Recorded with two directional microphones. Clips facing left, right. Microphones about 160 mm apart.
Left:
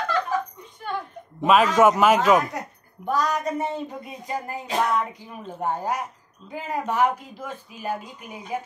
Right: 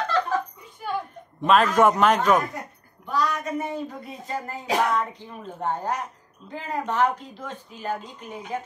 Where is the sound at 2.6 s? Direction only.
80° left.